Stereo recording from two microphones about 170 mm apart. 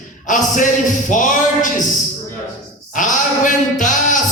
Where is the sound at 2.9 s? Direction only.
50° left (ahead or behind).